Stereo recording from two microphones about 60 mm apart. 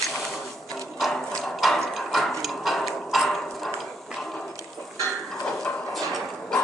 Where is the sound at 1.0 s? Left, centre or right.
Centre.